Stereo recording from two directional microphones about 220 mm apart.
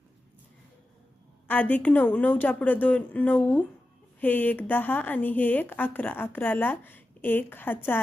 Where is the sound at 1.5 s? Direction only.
5° left (ahead or behind).